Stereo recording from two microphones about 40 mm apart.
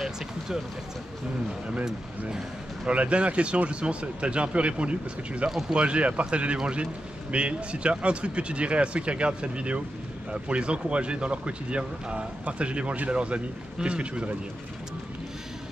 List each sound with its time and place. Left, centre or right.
2.9 s a man's voice: right